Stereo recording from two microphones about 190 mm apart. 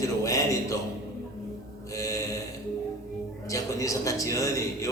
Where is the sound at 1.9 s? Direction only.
15° left (ahead or behind).